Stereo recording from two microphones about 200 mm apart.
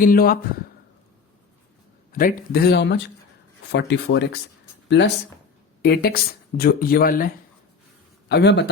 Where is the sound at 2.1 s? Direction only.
45° left (ahead or behind); by 4.2 s 60° left (ahead or behind).